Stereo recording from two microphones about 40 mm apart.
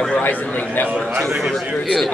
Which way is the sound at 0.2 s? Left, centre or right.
Left.